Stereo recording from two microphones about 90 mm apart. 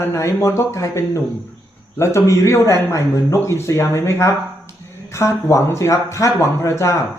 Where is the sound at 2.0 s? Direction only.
30° left (ahead or behind).